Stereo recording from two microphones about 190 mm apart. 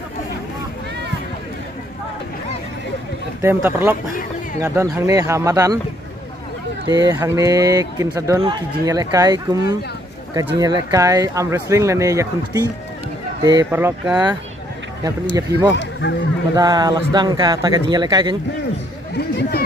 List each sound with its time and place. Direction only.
3.3 s speech: 10° right (ahead or behind)
6.9 s a man's voice: 20° right (ahead or behind)
15.7 s speech: 65° left (ahead or behind)
16.5 s a man's voice: 20° right (ahead or behind)
19.1 s a sound: 60° left (ahead or behind)